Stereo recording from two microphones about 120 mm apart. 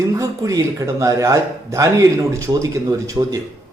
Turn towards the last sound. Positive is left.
turn(degrees=-25)  # may be behind; listen again after turning